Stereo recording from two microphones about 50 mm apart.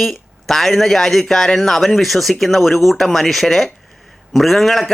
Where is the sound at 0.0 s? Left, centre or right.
Centre.